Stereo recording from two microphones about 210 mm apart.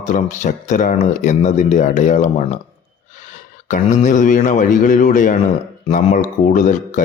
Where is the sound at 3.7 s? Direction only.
35° left (ahead or behind).